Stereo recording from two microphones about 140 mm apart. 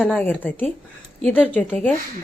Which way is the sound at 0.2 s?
15° left (ahead or behind).